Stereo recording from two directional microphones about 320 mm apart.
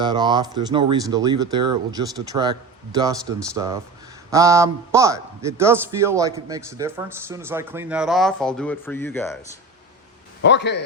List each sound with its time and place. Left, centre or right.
0.0 s a man's voice: centre
10.4 s a man's voice: left